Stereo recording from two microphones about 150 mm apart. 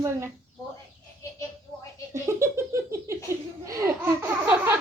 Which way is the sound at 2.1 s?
20° right (ahead or behind).